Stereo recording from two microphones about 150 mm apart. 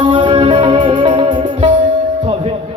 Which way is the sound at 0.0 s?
30° right (ahead or behind).